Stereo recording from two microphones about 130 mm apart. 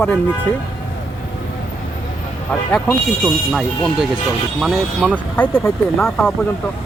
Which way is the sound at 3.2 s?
5° right (ahead or behind).